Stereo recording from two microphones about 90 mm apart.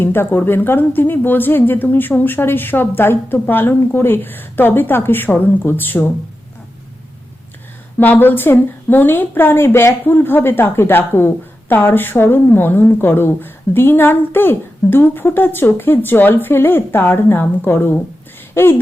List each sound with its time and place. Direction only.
0.0 s a woman's voice: 25° left (ahead or behind)
7.9 s a woman's voice: 20° left (ahead or behind)